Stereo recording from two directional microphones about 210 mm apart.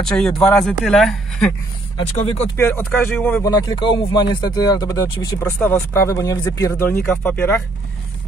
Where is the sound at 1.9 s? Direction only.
25° left (ahead or behind).